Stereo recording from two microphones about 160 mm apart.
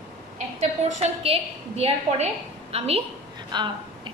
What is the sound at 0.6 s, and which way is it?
A woman's voice, 40° right (ahead or behind).